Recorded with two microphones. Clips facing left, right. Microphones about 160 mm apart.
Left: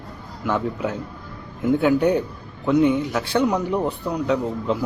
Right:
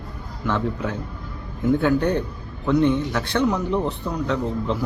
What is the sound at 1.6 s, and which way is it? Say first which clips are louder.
Speech: left 1 dB; 10° left (ahead or behind).